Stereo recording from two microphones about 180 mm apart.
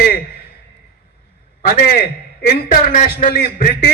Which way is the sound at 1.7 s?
55° left (ahead or behind).